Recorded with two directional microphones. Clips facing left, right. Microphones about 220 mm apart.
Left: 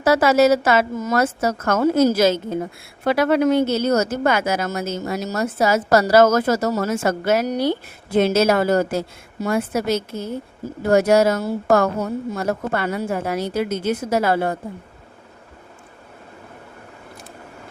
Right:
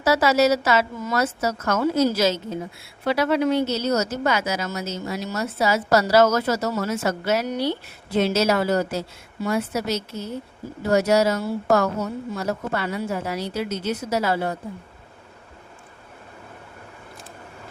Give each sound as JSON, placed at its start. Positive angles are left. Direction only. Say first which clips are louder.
{"t": 0.0, "sound": "speech", "louder": "left 4 dB", "side_deg": 50}